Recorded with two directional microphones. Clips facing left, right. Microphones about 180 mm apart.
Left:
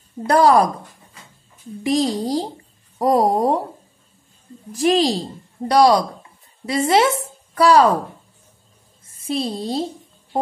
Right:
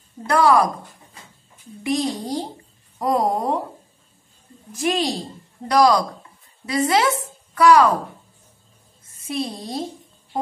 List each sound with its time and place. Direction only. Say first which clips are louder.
0.3 s a child's voice: left 3 dB; 35° left (ahead or behind)
1.9 s a child's voice: left 4 dB; 35° left (ahead or behind)
4.7 s a child's voice: left 5 dB; 30° left (ahead or behind)
9.3 s a woman's voice: left 4 dB; 30° left (ahead or behind)